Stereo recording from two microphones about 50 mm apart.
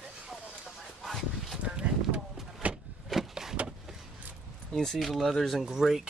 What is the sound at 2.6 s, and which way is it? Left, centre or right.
Vehicle, right.